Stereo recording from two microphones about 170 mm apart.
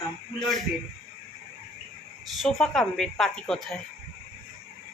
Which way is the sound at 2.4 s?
Centre (ahead or behind).